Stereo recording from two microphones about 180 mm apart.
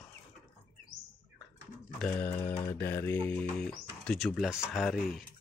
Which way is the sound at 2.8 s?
15° left (ahead or behind).